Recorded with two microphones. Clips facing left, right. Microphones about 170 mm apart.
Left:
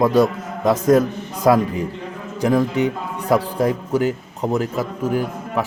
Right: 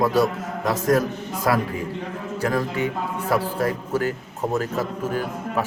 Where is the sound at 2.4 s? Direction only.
15° left (ahead or behind).